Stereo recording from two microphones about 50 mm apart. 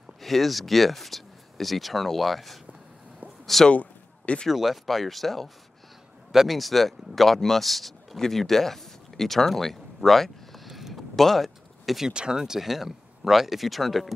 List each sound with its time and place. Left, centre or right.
0.2 s speech: centre
3.7 s a sound: left
4.5 s speech: centre
12.1 s speech: centre